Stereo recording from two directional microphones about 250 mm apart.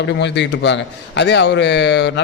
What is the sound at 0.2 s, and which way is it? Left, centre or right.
A man's voice, left.